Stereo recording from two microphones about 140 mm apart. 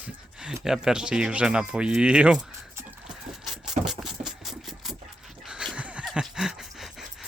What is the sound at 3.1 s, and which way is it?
Gears, centre (ahead or behind).